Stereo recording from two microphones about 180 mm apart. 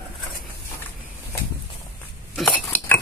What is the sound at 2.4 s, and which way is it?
Cutlery, centre (ahead or behind).